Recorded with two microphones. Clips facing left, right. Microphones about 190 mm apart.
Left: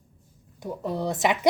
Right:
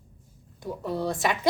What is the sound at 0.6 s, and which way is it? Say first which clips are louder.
Speech: left 1 dB; 20° left (ahead or behind).